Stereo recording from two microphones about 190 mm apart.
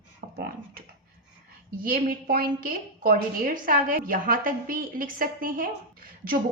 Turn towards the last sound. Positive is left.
turn(degrees=-50)  # may be behind; listen again after turning